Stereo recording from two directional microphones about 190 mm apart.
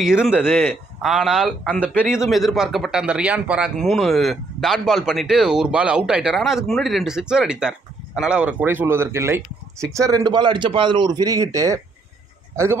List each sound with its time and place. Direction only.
0.0 s a man's voice: 5° right (ahead or behind)